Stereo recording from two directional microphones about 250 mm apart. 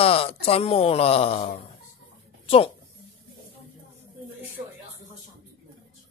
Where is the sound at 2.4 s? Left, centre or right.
Left.